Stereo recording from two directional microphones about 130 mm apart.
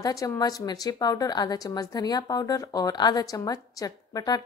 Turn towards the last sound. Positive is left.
turn(degrees=30)  # may be behind; listen again after turning